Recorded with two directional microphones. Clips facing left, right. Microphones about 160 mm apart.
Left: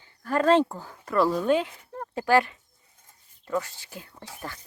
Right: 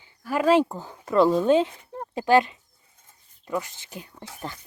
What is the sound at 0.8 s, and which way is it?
Speech, 20° right (ahead or behind).